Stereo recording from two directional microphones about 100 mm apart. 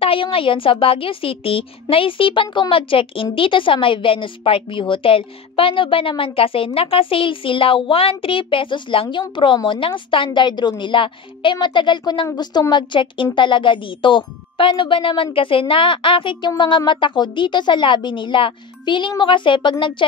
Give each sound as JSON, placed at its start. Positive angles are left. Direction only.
{"t": 0.0, "sound": "a woman's voice", "side_deg": 65}